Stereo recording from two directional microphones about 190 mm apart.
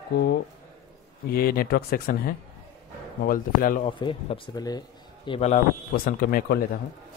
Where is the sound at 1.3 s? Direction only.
50° left (ahead or behind).